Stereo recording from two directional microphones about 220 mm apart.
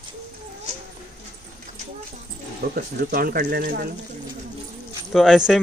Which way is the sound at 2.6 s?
45° right (ahead or behind).